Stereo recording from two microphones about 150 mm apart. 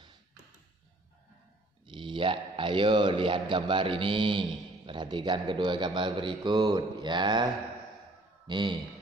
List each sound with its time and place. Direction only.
1.9 s a man's voice: 35° right (ahead or behind)
8.5 s a man's voice: 30° right (ahead or behind)